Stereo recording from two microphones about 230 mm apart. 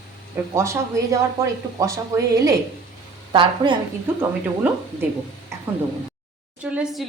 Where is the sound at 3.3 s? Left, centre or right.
Right.